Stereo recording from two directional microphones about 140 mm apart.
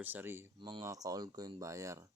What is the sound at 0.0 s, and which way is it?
Speech, 15° right (ahead or behind).